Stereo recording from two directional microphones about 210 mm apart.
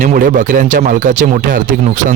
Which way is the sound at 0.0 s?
40° right (ahead or behind).